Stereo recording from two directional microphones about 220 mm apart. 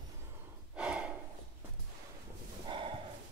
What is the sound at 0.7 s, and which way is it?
Gasp, 5° right (ahead or behind).